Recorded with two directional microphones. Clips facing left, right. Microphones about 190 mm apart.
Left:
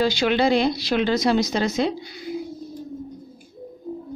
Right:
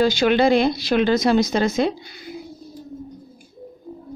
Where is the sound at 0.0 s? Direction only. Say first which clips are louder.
Right 3 dB; 50° right (ahead or behind).